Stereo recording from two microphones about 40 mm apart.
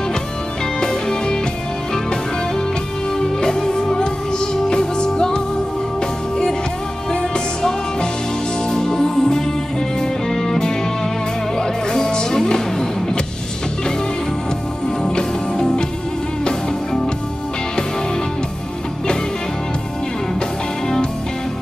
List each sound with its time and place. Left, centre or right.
0.7 s music: centre
3.2 s music: centre
15.0 s music: centre